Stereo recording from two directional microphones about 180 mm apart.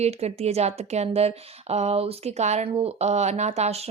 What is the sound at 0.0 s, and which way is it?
A woman's voice, 35° right (ahead or behind).